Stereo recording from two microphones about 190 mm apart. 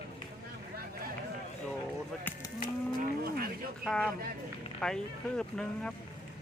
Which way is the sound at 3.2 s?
55° right (ahead or behind).